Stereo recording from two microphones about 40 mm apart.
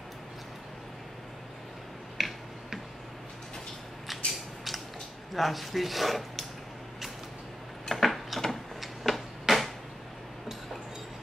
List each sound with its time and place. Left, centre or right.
2.2 s tick-tock: centre
4.1 s a sound: centre
5.3 s speech: centre
7.9 s tick-tock: centre